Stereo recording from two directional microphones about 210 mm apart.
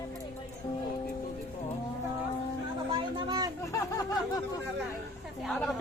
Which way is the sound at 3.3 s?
20° right (ahead or behind).